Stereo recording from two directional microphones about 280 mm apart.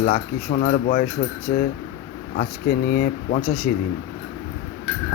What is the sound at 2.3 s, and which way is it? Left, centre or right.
Speech, left.